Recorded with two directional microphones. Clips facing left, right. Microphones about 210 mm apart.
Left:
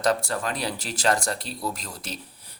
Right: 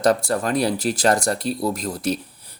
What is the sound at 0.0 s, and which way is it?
Speech, 35° right (ahead or behind).